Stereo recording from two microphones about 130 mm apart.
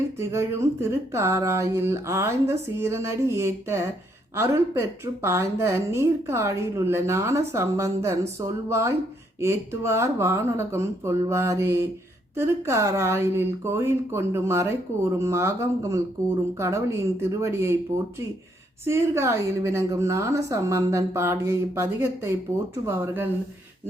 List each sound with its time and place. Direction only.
0.2 s a woman's voice: 20° right (ahead or behind)
18.9 s a woman's voice: 20° right (ahead or behind)